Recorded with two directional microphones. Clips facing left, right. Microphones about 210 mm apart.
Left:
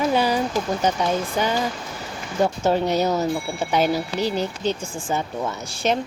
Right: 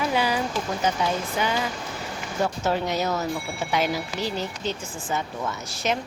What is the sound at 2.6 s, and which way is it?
Speech, 30° left (ahead or behind).